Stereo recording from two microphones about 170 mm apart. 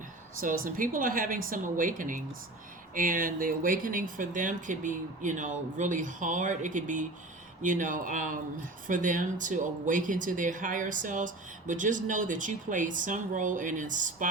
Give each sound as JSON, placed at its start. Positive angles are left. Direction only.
{"t": 0.3, "sound": "speech", "side_deg": -55}